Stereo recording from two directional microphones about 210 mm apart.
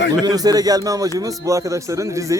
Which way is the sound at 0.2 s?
20° right (ahead or behind).